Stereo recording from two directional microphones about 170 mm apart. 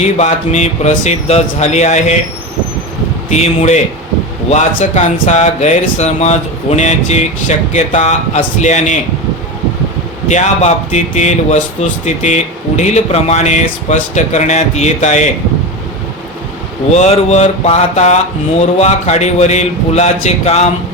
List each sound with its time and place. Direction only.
0.0 s speech: 40° left (ahead or behind)
3.2 s a man's voice: 40° left (ahead or behind)
10.2 s speech: 40° left (ahead or behind)
16.9 s a man's voice: 40° left (ahead or behind)